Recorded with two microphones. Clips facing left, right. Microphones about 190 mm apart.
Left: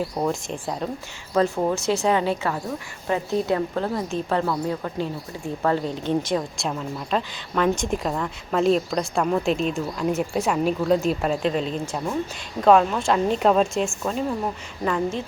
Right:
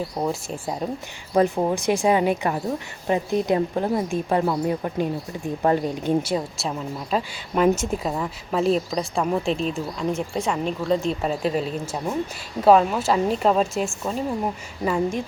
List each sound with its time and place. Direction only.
0.2 s a woman's voice: 5° right (ahead or behind)